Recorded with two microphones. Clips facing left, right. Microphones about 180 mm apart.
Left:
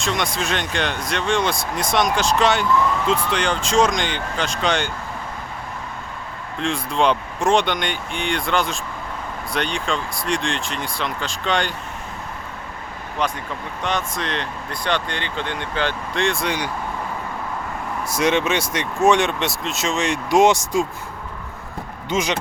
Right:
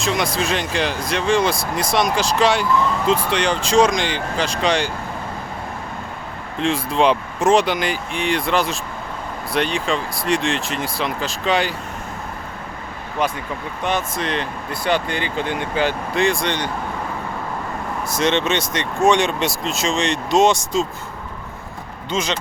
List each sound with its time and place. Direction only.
0.0 s speech: centre (ahead or behind)
6.6 s speech: centre (ahead or behind)
13.8 s speech: 5° right (ahead or behind)
18.1 s speech: 10° left (ahead or behind)
22.1 s speech: 15° left (ahead or behind)